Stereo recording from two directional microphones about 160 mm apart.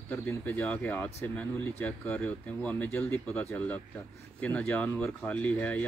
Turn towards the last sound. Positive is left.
turn(degrees=10)  # may be behind; listen again after turning